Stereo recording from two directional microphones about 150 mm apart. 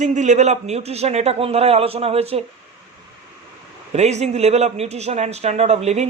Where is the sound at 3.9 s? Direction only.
50° right (ahead or behind).